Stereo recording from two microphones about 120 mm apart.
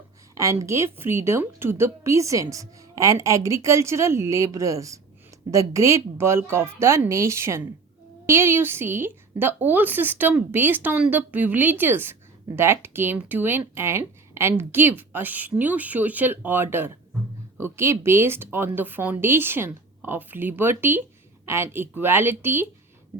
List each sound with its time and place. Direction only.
0.3 s a woman's voice: 25° right (ahead or behind)